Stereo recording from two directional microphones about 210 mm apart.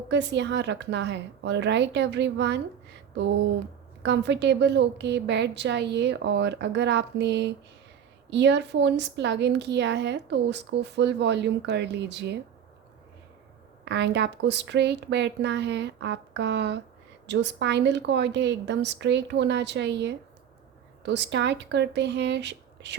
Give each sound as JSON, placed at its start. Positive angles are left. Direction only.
{"t": 0.1, "sound": "a woman's voice", "side_deg": -55}
{"t": 4.0, "sound": "a woman's voice", "side_deg": -55}
{"t": 13.8, "sound": "a woman's voice", "side_deg": -55}